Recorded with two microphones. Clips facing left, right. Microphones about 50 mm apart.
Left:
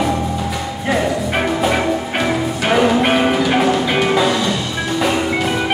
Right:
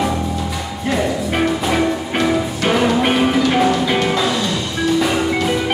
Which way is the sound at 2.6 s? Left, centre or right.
Centre.